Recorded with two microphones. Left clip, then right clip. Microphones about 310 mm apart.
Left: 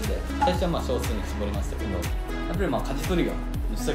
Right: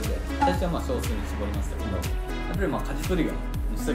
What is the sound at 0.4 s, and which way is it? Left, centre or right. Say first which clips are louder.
Music: even; centre.